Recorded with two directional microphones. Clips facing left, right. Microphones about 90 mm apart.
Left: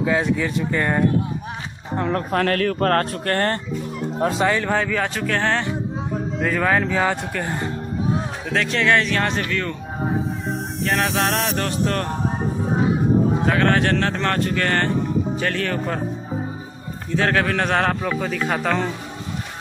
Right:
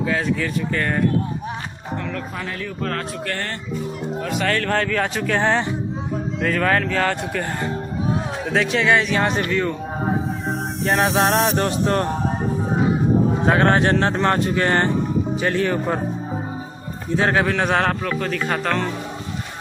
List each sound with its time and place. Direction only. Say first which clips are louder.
0.0 s speech: left 2 dB; 20° left (ahead or behind)
2.0 s speech: left 7 dB; 35° left (ahead or behind)
2.3 s a man's voice: left 9 dB; 70° left (ahead or behind); by 3.5 s 45° left (ahead or behind)
4.2 s speech: left 6 dB; 30° left (ahead or behind)
4.5 s speech: even; 10° left (ahead or behind); by 5.7 s 10° right (ahead or behind)
6.4 s speech: even; 5° left (ahead or behind)
8.5 s speech: right 1 dB; 10° right (ahead or behind)
10.4 s music: right 2 dB; centre (ahead or behind)
11.5 s music: right 3 dB; 25° right (ahead or behind)
13.5 s music: right 5 dB; 25° right (ahead or behind)
15.3 s speech: right 3 dB; 15° right (ahead or behind)
17.1 s speech: right 1 dB; 15° right (ahead or behind)
17.5 s speech: right 1 dB; 5° right (ahead or behind)